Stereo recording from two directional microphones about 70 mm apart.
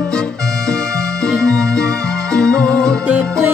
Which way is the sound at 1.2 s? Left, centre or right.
Centre.